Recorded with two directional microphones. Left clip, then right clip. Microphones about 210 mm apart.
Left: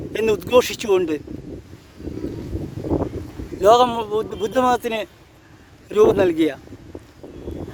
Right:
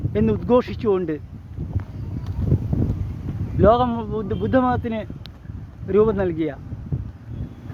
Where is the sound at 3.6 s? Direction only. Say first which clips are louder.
Left 3 dB; 45° left (ahead or behind).